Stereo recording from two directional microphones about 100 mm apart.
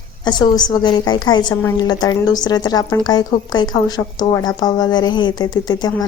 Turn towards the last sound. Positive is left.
turn(degrees=40)  # may be behind; listen again after turning